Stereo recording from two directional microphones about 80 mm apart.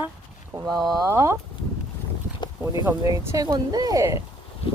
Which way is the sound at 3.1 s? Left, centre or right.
Right.